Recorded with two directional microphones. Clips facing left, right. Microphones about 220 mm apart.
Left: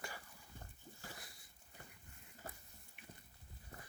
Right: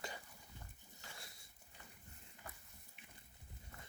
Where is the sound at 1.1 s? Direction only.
25° right (ahead or behind).